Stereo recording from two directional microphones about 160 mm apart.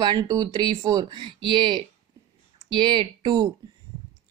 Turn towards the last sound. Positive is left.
turn(degrees=-30)  # may be behind; listen again after turning